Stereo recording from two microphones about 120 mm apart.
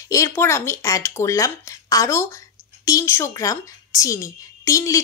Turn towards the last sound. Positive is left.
turn(degrees=25)  # may be behind; listen again after turning